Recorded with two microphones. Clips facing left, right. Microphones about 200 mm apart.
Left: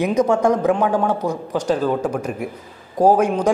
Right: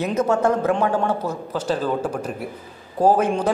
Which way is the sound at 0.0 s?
15° left (ahead or behind).